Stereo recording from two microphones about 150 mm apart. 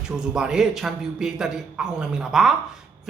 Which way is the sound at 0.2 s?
5° right (ahead or behind).